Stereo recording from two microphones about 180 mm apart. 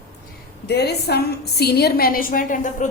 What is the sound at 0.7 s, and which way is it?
A woman's voice, 65° left (ahead or behind).